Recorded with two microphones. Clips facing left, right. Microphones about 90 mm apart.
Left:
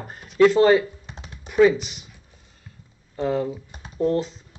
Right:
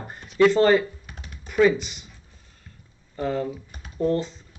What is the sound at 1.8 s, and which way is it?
Speech, 5° left (ahead or behind).